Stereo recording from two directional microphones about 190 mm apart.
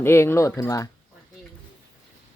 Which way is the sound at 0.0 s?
15° left (ahead or behind).